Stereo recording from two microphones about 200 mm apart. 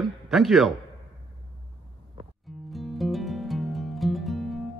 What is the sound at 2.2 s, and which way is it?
Music, 25° right (ahead or behind).